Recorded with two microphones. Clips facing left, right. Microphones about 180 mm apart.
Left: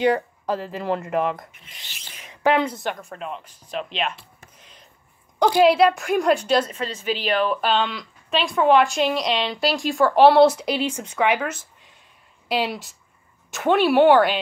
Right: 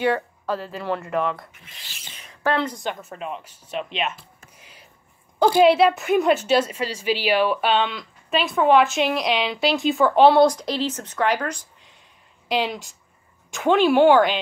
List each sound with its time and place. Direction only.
0.1 s speech: 40° left (ahead or behind)
1.4 s rub: 20° left (ahead or behind)
2.4 s a woman's voice: 10° left (ahead or behind)